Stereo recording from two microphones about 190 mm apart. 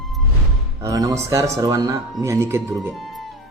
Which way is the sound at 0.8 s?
20° right (ahead or behind).